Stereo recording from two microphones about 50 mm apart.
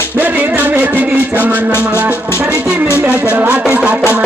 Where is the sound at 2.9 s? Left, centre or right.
Right.